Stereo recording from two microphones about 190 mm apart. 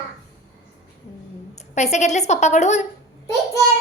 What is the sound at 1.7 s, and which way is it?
Speech, 35° left (ahead or behind).